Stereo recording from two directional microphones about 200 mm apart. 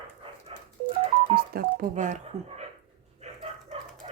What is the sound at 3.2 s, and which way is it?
Dog, 30° right (ahead or behind).